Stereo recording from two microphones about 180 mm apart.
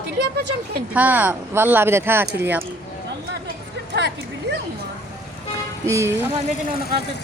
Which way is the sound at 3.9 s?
70° right (ahead or behind).